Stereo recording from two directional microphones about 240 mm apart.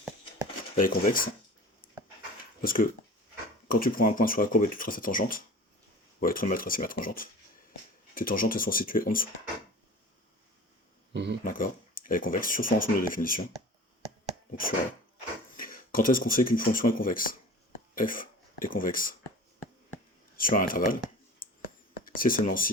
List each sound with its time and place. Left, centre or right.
0.8 s speech: left
2.6 s speech: left
11.1 s a sound: right
11.4 s speech: left
15.5 s speech: left
20.3 s a sound: left